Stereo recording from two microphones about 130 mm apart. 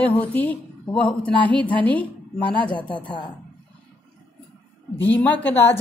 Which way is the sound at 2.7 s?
40° left (ahead or behind).